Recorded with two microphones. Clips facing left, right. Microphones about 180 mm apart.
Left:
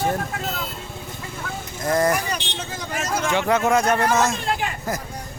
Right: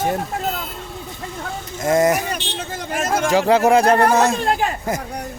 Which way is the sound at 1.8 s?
25° right (ahead or behind).